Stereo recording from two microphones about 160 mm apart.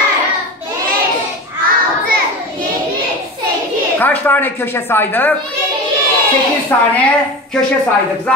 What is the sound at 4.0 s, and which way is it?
A woman's voice, 10° left (ahead or behind).